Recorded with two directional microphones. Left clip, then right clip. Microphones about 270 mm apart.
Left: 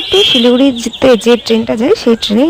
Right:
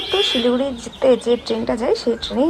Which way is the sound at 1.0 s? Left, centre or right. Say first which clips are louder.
Left 7 dB; left.